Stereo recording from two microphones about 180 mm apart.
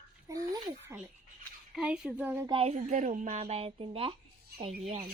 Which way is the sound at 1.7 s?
5° right (ahead or behind).